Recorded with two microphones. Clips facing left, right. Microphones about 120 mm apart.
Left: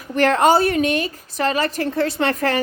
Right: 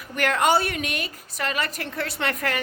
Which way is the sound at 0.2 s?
35° left (ahead or behind).